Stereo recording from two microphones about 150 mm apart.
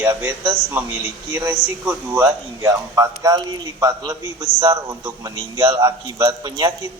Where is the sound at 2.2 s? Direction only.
25° right (ahead or behind).